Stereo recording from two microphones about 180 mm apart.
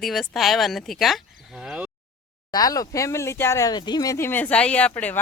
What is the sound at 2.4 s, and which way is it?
Speech, 20° left (ahead or behind).